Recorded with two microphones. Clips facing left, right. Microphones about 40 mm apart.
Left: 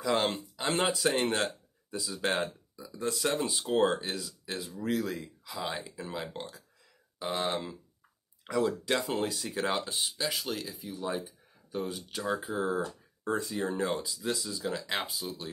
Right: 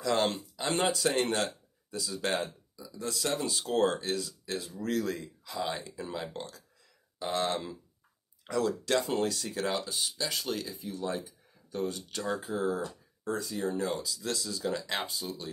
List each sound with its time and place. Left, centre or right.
0.0 s a man's voice: centre
2.8 s speech: left
10.0 s speech: centre
12.5 s speech: left
14.1 s speech: centre